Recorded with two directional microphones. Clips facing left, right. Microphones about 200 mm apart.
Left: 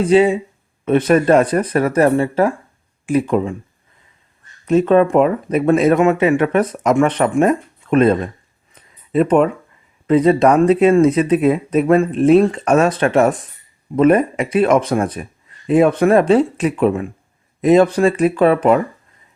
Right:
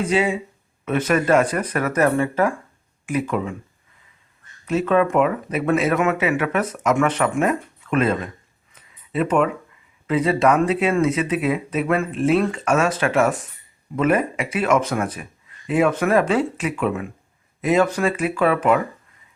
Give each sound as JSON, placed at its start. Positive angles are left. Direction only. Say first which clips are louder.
{"t": 0.0, "sound": "speech", "louder": "left 8 dB", "side_deg": 35}
{"t": 4.6, "sound": "speech", "louder": "left 6 dB", "side_deg": 35}
{"t": 8.7, "sound": "a sound", "louder": "left 8 dB", "side_deg": 35}
{"t": 10.1, "sound": "speech", "louder": "left 6 dB", "side_deg": 40}